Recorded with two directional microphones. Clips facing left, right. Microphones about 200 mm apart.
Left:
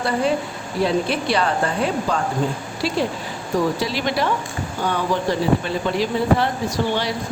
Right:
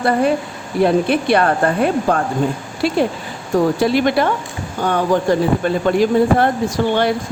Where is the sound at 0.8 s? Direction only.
55° right (ahead or behind).